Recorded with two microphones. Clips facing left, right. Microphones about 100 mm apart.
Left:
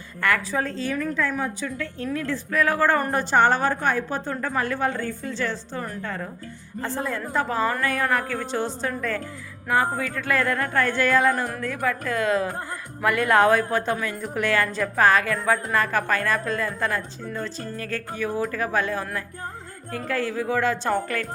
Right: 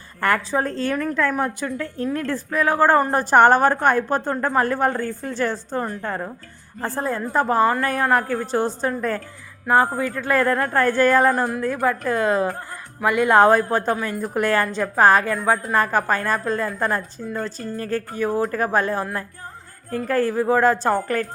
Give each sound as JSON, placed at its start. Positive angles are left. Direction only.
{"t": 0.2, "sound": "a woman's voice", "side_deg": -40}
{"t": 0.9, "sound": "a woman's voice", "side_deg": -60}
{"t": 2.1, "sound": "a woman's voice", "side_deg": -50}
{"t": 2.5, "sound": "a woman's voice", "side_deg": -30}
{"t": 3.3, "sound": "a woman's voice", "side_deg": -55}
{"t": 11.6, "sound": "a woman's voice", "side_deg": -35}
{"t": 13.0, "sound": "speech", "side_deg": -20}
{"t": 13.4, "sound": "a woman's voice", "side_deg": -35}